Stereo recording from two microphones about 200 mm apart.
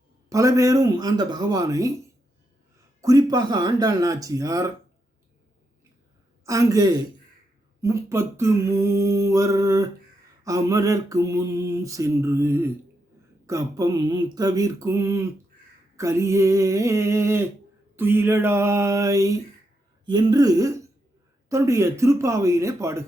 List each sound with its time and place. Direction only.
0.3 s mantra: 15° right (ahead or behind)
3.0 s mantra: 20° right (ahead or behind)
6.4 s mantra: 15° right (ahead or behind)
20.1 s a sound: 20° right (ahead or behind)
21.5 s mantra: 15° right (ahead or behind)